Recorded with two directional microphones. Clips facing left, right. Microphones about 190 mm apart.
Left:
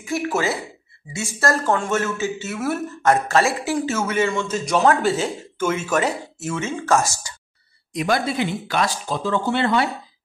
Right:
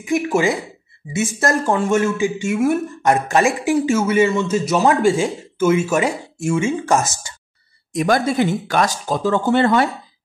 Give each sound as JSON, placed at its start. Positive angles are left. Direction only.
{"t": 0.0, "sound": "a woman's voice", "side_deg": -15}
{"t": 7.9, "sound": "speech", "side_deg": -45}